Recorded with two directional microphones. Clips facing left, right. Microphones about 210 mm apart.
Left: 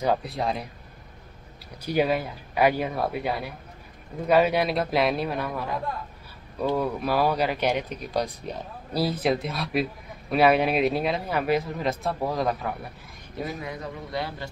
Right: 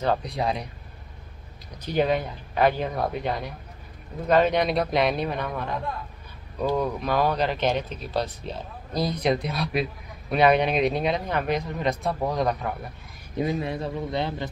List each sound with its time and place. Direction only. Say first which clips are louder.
0.0 s a man's voice: even; 10° left (ahead or behind)
1.8 s a man's voice: even; 10° left (ahead or behind)
13.4 s a man's voice: right 6 dB; 25° right (ahead or behind)